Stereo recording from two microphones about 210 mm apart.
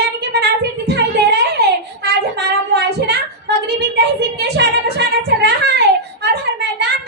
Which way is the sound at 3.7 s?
50° right (ahead or behind).